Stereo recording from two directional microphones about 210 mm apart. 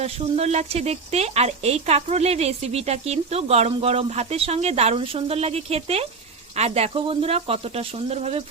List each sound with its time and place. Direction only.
0.0 s speech: 30° right (ahead or behind)